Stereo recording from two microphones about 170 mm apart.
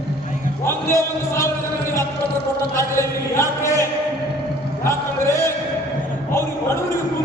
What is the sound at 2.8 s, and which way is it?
Chant, 15° left (ahead or behind).